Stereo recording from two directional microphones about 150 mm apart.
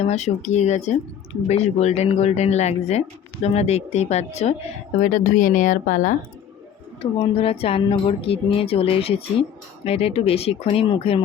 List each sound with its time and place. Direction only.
0.0 s speech: 50° left (ahead or behind)
4.9 s speech: 60° left (ahead or behind)
7.0 s speech: 40° left (ahead or behind)